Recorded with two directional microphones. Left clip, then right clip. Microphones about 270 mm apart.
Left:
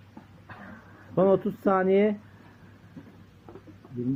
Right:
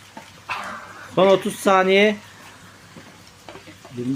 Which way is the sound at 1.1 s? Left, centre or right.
Centre.